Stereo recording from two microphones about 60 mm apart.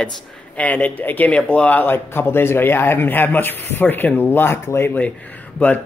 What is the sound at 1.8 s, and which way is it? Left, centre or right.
A man's voice, left.